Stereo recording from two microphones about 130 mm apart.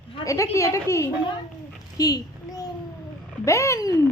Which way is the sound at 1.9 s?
30° left (ahead or behind).